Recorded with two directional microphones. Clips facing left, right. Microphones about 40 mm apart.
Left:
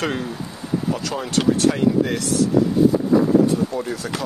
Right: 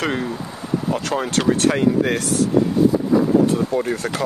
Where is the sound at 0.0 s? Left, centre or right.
Right.